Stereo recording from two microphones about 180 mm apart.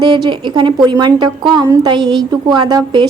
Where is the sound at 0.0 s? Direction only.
25° right (ahead or behind).